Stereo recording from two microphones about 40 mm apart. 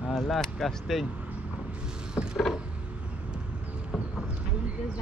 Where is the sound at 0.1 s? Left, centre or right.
Centre.